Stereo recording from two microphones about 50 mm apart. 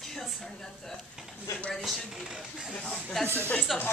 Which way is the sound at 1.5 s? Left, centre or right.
Left.